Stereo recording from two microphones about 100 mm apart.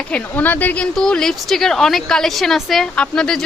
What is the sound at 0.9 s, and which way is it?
A woman's voice, 5° left (ahead or behind).